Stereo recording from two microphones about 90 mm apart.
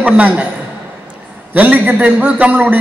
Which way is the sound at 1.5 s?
15° right (ahead or behind).